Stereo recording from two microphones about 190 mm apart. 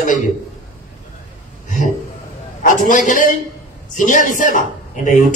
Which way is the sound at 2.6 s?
45° left (ahead or behind).